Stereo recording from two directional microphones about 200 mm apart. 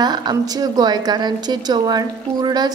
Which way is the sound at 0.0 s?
20° right (ahead or behind).